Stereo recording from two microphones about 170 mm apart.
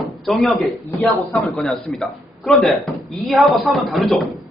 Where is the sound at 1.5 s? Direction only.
Centre (ahead or behind).